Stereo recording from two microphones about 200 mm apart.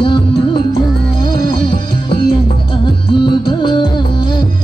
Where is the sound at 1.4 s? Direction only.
20° left (ahead or behind).